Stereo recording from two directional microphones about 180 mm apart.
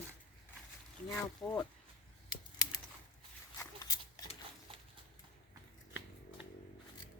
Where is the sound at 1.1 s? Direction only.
5° left (ahead or behind).